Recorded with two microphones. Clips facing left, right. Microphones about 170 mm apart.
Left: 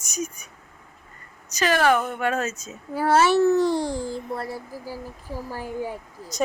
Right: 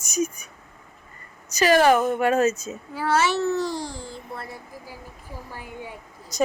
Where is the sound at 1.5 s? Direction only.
10° right (ahead or behind).